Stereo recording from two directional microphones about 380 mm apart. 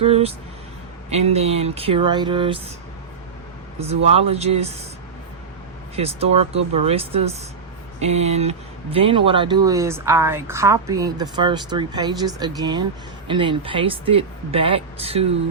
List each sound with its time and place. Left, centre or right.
0.0 s speech: centre
3.8 s speech: centre
6.0 s speech: centre